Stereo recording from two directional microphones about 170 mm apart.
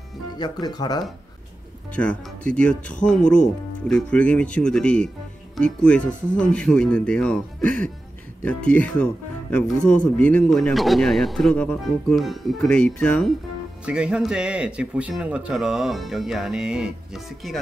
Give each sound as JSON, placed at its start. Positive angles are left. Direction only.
{"t": 0.4, "sound": "speech", "side_deg": 25}
{"t": 2.0, "sound": "speech", "side_deg": 5}
{"t": 13.8, "sound": "speech", "side_deg": -5}